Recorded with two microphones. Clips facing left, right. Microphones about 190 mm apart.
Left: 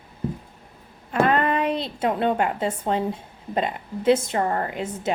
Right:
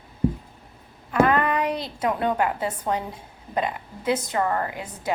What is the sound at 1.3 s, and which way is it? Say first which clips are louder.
A woman's voice: left 1 dB; 30° left (ahead or behind).